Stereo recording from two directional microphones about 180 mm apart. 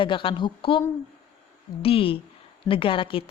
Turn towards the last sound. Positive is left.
turn(degrees=30)  # may be behind; listen again after turning